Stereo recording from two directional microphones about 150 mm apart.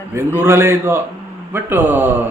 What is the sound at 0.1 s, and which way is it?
Speech, 15° right (ahead or behind).